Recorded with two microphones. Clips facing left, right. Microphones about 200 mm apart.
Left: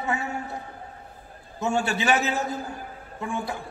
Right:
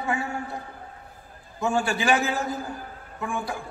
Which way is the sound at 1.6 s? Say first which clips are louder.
Right 1 dB; 25° left (ahead or behind).